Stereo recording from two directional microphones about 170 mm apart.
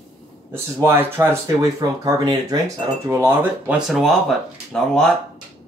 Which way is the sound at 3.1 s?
10° right (ahead or behind).